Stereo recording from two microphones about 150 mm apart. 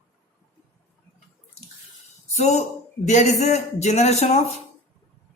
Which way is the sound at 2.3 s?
50° left (ahead or behind).